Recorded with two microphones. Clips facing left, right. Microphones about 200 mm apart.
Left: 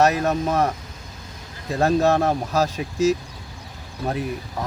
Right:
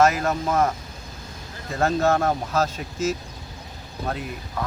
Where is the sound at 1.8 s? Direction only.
15° left (ahead or behind).